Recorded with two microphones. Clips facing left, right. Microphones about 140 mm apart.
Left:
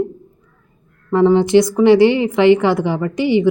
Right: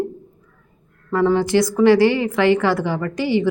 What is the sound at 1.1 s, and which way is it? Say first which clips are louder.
A woman's voice: left 5 dB; 20° left (ahead or behind).